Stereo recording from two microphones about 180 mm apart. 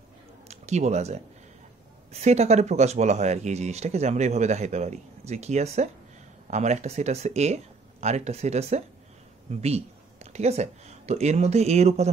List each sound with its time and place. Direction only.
0.5 s speech: 40° right (ahead or behind)